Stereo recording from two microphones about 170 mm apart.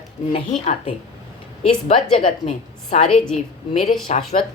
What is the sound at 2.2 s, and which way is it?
Speech, 45° left (ahead or behind).